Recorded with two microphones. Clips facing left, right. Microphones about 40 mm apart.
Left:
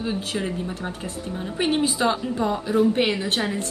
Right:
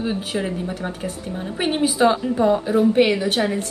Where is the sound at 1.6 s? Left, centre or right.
Centre.